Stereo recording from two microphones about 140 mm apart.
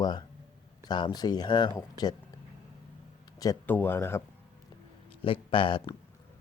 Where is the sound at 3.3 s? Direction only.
25° left (ahead or behind).